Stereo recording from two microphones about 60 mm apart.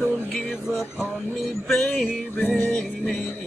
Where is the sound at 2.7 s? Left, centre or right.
Centre.